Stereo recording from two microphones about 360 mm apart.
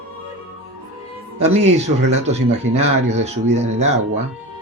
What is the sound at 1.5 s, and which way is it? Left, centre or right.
Speech, centre.